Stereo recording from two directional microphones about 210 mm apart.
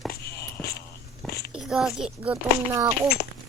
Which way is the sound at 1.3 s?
50° left (ahead or behind).